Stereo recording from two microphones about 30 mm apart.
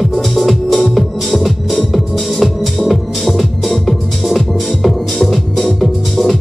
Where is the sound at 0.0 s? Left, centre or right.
Centre.